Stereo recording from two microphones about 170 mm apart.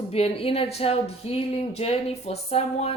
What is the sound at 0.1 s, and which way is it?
Speech, 35° left (ahead or behind).